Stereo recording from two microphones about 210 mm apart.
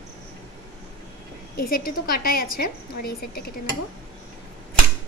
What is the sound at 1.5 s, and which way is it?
A woman's voice, 45° left (ahead or behind).